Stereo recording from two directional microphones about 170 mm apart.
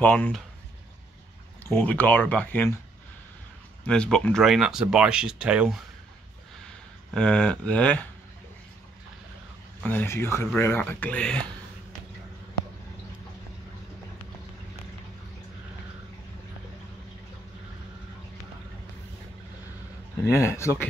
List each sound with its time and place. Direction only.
0.0 s speech: 10° left (ahead or behind)
1.7 s speech: 10° left (ahead or behind)
3.8 s speech: 5° left (ahead or behind)
7.2 s speech: 5° left (ahead or behind)
9.8 s speech: 10° left (ahead or behind)
20.2 s speech: 15° left (ahead or behind)